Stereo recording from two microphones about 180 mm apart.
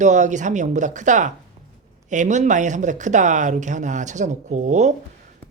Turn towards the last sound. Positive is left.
turn(degrees=-40)  # may be behind; listen again after turning